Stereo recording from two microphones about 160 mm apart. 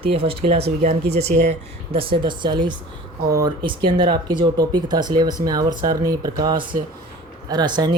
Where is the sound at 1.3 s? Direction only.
55° right (ahead or behind).